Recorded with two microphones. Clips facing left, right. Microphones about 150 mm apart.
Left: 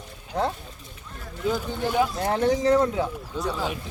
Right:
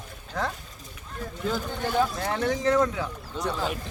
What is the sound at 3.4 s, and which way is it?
Speech, centre (ahead or behind).